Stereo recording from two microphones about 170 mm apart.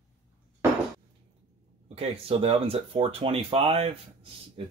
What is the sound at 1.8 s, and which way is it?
Speech, 35° right (ahead or behind).